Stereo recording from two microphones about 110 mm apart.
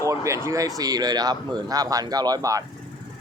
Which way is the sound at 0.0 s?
30° right (ahead or behind).